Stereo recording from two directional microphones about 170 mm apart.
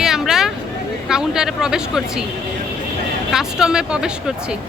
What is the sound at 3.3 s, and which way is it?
Speech, 5° right (ahead or behind).